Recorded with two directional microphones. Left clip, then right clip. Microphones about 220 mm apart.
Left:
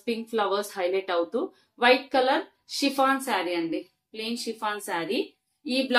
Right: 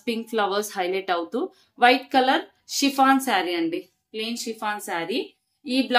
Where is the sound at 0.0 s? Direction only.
50° right (ahead or behind).